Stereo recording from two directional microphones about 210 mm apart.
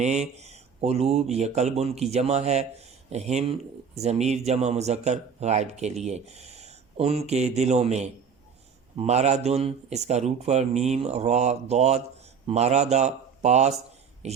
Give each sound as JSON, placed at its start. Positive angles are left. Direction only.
{"t": 0.0, "sound": "speech", "side_deg": -35}